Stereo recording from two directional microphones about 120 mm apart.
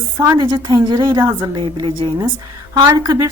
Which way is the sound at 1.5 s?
40° right (ahead or behind).